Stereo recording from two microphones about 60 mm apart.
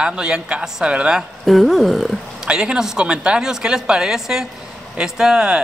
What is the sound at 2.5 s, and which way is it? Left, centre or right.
A woman's voice, centre.